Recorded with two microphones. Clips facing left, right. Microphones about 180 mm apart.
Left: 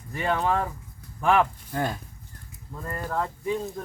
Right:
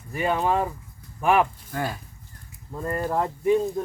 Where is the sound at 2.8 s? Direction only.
25° right (ahead or behind).